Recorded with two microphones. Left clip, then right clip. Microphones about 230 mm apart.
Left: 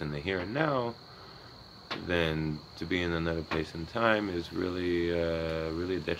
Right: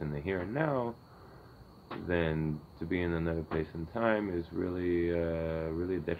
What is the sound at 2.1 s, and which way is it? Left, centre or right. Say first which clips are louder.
Speech: left 2 dB; centre.